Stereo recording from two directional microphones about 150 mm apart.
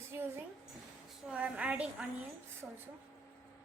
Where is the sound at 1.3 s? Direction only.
10° right (ahead or behind).